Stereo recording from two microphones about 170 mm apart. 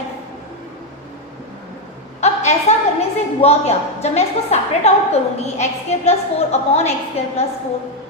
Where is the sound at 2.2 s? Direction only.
40° left (ahead or behind).